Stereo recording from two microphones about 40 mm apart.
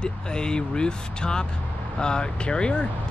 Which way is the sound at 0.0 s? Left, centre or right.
Left.